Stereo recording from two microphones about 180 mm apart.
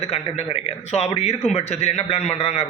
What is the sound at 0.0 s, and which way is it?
A man's voice, 35° left (ahead or behind).